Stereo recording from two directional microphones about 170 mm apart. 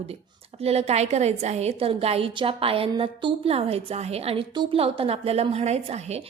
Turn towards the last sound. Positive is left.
turn(degrees=-40)  # may be behind; listen again after turning